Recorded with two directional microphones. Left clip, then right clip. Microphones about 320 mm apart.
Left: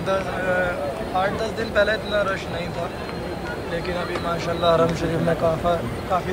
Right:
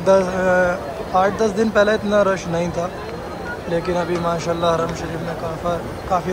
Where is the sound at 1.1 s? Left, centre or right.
Centre.